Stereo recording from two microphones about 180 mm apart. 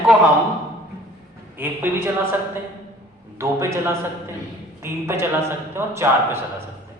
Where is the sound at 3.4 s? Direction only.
15° right (ahead or behind).